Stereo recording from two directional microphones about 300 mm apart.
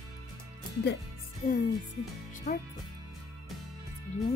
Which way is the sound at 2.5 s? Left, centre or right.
Left.